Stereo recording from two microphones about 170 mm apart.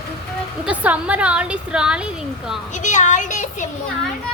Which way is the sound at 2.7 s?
45° left (ahead or behind).